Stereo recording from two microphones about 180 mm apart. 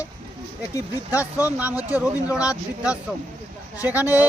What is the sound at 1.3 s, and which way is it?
Speech, 10° right (ahead or behind).